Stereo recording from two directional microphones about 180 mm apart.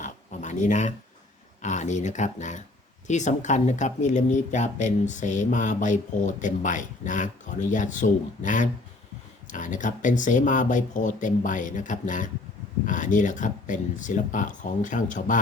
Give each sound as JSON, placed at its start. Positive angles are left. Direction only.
{"t": 0.0, "sound": "dog", "side_deg": 45}
{"t": 1.6, "sound": "speech", "side_deg": 40}